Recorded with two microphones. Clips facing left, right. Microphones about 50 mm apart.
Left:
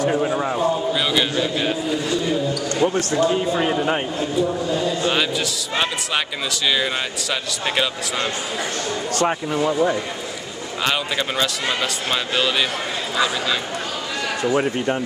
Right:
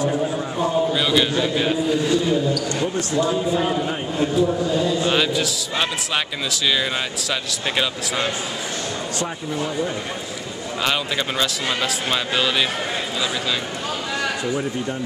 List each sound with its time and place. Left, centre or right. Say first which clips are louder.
0.1 s a sound: left 3 dB; left
0.6 s a sound: even; centre
2.8 s speech: left 6 dB; left
4.4 s a man's voice: even; centre
9.6 s speech: left 5 dB; left
10.8 s a man's voice: left 1 dB; centre
14.4 s speech: left 4 dB; left